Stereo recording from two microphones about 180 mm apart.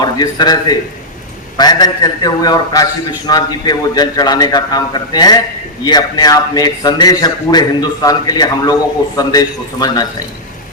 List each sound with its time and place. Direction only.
0.0 s a man's voice: 25° left (ahead or behind)